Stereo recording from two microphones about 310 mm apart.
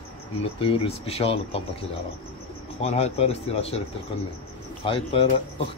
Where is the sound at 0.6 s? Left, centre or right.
Centre.